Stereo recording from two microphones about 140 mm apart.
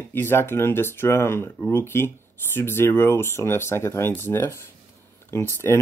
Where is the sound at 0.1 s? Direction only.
15° left (ahead or behind).